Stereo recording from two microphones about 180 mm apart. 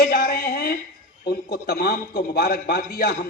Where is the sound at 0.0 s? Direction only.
55° left (ahead or behind).